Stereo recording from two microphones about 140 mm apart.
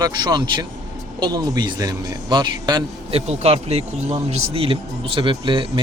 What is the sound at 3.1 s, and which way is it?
Speech, 45° right (ahead or behind).